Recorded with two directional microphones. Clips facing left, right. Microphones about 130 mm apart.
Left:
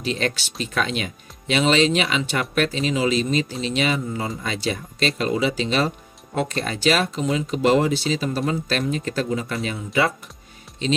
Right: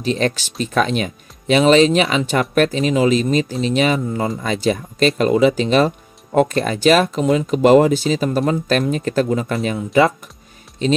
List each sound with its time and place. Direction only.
0.0 s speech: 40° right (ahead or behind)